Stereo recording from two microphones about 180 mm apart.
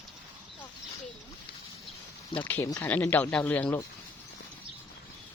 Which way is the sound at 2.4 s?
10° left (ahead or behind).